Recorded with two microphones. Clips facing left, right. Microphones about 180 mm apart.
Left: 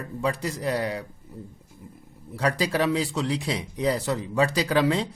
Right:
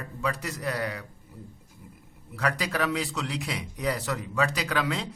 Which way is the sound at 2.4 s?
30° left (ahead or behind).